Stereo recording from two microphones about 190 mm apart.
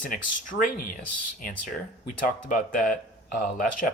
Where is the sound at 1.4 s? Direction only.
45° left (ahead or behind).